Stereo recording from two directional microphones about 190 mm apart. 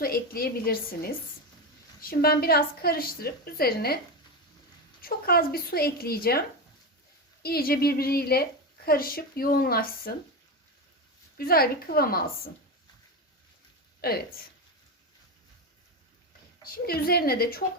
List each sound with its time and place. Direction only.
0.0 s a woman's voice: 50° left (ahead or behind)
7.4 s a woman's voice: 50° left (ahead or behind)
11.3 s a woman's voice: 50° left (ahead or behind)
14.0 s speech: 55° left (ahead or behind)
16.8 s a woman's voice: 55° left (ahead or behind)